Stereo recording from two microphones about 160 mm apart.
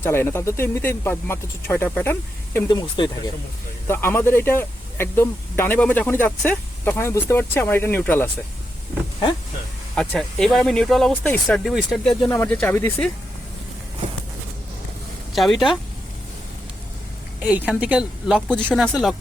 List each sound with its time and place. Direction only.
0.0 s speech: 15° left (ahead or behind)
2.6 s speech: 25° left (ahead or behind)
3.8 s speech: 15° left (ahead or behind)
9.9 s speech: 5° left (ahead or behind)
15.3 s speech: centre (ahead or behind)
17.4 s a woman's voice: 5° right (ahead or behind)
18.3 s speech: 5° left (ahead or behind)